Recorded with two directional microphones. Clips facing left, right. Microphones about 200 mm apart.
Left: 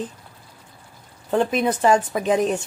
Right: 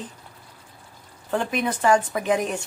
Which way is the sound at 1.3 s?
20° left (ahead or behind).